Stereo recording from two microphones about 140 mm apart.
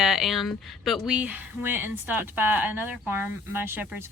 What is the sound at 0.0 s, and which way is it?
Speech, centre (ahead or behind).